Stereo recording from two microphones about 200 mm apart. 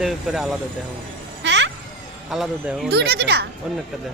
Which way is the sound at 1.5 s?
65° right (ahead or behind).